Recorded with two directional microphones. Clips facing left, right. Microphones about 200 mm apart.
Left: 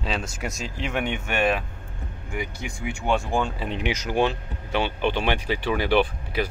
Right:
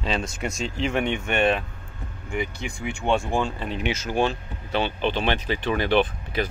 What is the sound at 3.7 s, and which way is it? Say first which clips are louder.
Speech: even; 15° left (ahead or behind).